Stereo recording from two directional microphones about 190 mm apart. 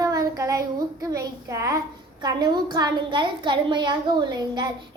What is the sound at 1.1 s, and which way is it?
A child's voice, 15° right (ahead or behind).